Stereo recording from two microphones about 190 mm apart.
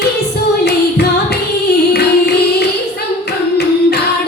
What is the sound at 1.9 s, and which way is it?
Music, 60° left (ahead or behind).